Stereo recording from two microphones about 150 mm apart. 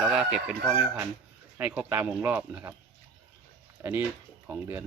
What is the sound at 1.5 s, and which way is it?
Speech, 10° right (ahead or behind).